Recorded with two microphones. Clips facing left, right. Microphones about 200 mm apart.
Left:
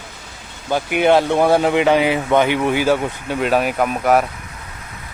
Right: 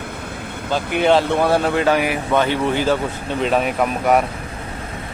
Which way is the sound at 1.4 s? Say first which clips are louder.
Left 3 dB; 15° left (ahead or behind).